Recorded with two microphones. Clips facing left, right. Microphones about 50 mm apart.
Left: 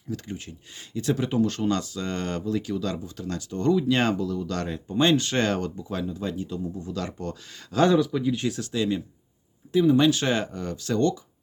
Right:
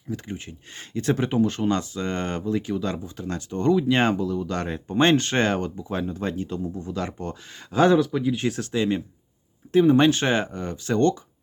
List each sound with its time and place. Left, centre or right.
0.1 s speech: right
0.7 s speech: right
1.4 s speech: right
4.9 s speech: right
6.0 s speech: right
8.4 s speech: right